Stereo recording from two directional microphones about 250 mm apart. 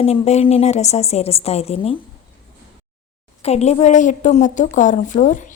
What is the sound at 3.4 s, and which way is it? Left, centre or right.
Speech, left.